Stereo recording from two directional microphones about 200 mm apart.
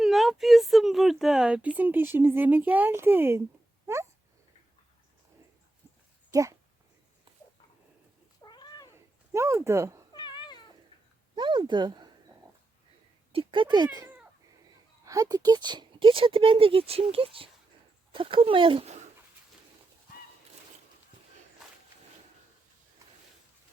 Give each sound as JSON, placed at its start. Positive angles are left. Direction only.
{"t": 0.0, "sound": "speech", "side_deg": 0}
{"t": 6.3, "sound": "speech", "side_deg": -15}
{"t": 8.4, "sound": "cat", "side_deg": 20}
{"t": 9.3, "sound": "speech", "side_deg": -15}
{"t": 10.1, "sound": "cat", "side_deg": 20}
{"t": 11.3, "sound": "speech", "side_deg": -25}
{"t": 13.3, "sound": "speech", "side_deg": -25}